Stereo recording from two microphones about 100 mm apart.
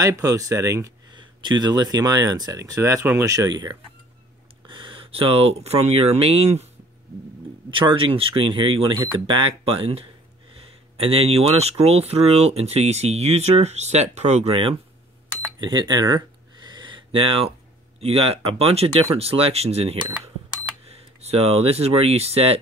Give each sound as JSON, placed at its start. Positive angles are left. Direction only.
{"t": 0.0, "sound": "speech", "side_deg": -35}
{"t": 1.1, "sound": "speech", "side_deg": -50}
{"t": 4.6, "sound": "speech", "side_deg": -55}
{"t": 7.7, "sound": "speech", "side_deg": -65}
{"t": 15.6, "sound": "speech", "side_deg": -45}
{"t": 16.6, "sound": "a sound", "side_deg": -50}
{"t": 18.0, "sound": "speech", "side_deg": -80}
{"t": 19.1, "sound": "speech", "side_deg": -75}